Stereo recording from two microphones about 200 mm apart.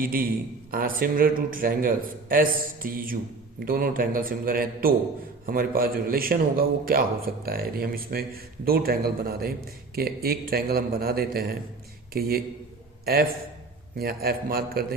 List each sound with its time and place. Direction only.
0.0 s a man's voice: 45° right (ahead or behind)